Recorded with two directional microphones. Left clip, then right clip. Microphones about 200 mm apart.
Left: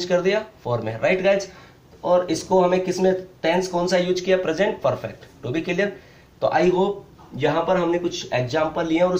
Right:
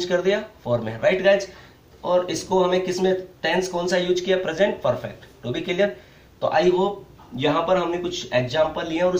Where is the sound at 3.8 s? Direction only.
35° left (ahead or behind).